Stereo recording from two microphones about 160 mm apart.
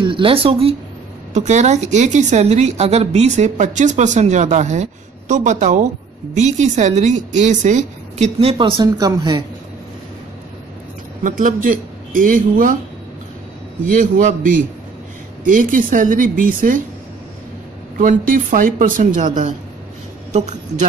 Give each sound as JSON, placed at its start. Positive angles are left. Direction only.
{"t": 0.0, "sound": "speech", "side_deg": -30}
{"t": 1.3, "sound": "a woman's voice", "side_deg": -45}
{"t": 11.2, "sound": "speech", "side_deg": -55}
{"t": 13.9, "sound": "speech", "side_deg": -55}
{"t": 17.9, "sound": "a woman's voice", "side_deg": -55}